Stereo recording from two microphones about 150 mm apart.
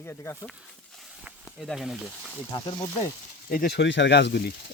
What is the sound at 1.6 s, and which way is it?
Speech, centre (ahead or behind).